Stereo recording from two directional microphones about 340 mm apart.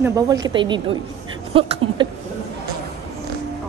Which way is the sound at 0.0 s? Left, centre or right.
Centre.